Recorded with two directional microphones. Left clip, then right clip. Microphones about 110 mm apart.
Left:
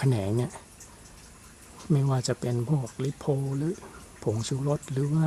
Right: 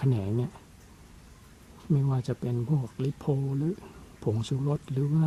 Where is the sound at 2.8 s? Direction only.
10° right (ahead or behind).